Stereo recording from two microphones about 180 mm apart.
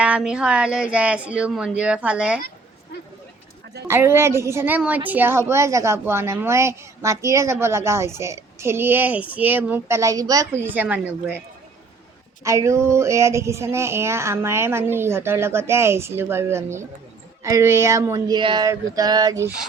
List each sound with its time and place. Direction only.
0.0 s speech: 5° right (ahead or behind)
3.8 s a woman's voice: 15° right (ahead or behind)
12.4 s a woman's voice: 15° right (ahead or behind)